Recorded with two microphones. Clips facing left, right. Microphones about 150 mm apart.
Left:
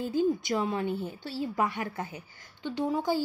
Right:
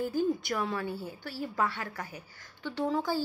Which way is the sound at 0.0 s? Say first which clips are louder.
Left 2 dB; 20° left (ahead or behind).